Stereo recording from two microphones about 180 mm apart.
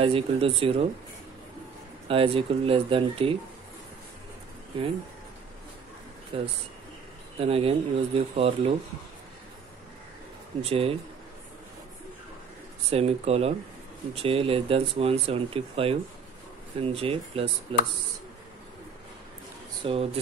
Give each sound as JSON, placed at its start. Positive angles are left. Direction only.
{"t": 0.0, "sound": "speech", "side_deg": -30}
{"t": 2.0, "sound": "speech", "side_deg": -30}
{"t": 6.3, "sound": "speech", "side_deg": -30}
{"t": 10.6, "sound": "speech", "side_deg": -35}
{"t": 12.9, "sound": "speech", "side_deg": -35}
{"t": 19.8, "sound": "speech", "side_deg": -30}